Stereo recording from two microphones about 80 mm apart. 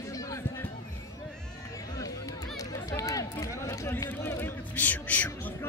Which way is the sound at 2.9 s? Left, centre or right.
Left.